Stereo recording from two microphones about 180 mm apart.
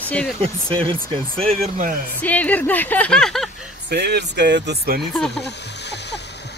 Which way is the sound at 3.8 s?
65° right (ahead or behind).